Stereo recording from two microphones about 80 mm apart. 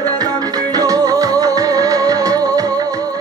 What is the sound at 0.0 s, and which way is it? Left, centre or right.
Music, right.